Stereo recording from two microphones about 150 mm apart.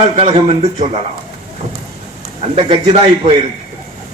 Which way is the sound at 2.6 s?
40° right (ahead or behind).